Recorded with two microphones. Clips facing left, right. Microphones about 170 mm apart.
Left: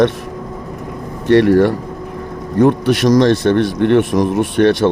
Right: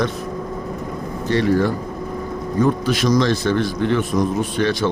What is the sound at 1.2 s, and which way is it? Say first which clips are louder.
A man's voice: left 8 dB; 70° left (ahead or behind).